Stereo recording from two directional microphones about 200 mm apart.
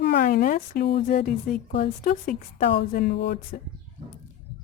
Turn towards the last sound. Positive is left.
turn(degrees=55)  # may be behind; listen again after turning